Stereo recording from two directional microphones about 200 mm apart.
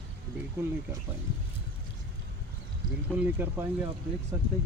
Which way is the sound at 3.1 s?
10° right (ahead or behind).